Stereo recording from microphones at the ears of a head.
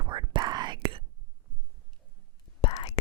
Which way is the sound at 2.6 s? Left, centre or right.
Left.